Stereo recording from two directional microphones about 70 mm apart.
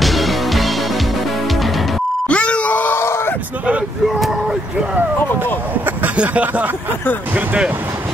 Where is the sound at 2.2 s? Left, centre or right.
Centre.